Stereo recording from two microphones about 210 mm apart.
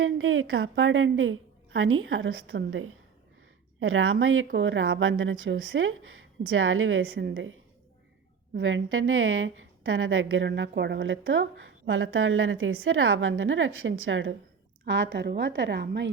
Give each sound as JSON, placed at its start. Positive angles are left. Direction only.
{"t": 0.2, "sound": "a woman's voice", "side_deg": -75}
{"t": 3.8, "sound": "a woman's voice", "side_deg": -80}
{"t": 4.5, "sound": "a woman's voice", "side_deg": -60}
{"t": 8.5, "sound": "a woman's voice", "side_deg": -65}